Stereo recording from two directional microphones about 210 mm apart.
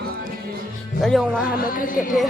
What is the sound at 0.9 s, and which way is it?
Speech, centre (ahead or behind).